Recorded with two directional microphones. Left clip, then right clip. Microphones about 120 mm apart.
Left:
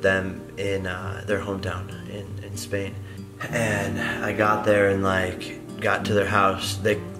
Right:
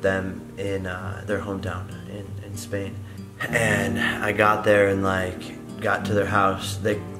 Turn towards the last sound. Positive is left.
turn(degrees=0)  # may be behind; listen again after turning